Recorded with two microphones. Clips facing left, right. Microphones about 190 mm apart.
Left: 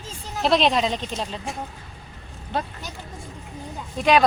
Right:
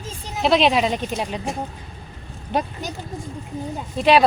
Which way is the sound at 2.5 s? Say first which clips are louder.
Right 4 dB; 15° right (ahead or behind).